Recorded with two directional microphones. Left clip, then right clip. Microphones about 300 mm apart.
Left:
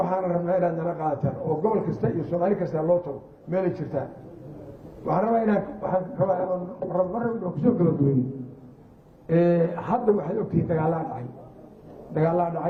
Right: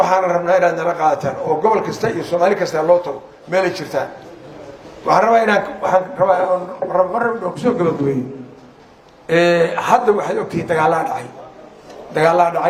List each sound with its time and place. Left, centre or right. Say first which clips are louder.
0.0 s a man's voice: right 11 dB; centre
5.0 s a man's voice: right 11 dB; centre
9.2 s a man's voice: right 8 dB; centre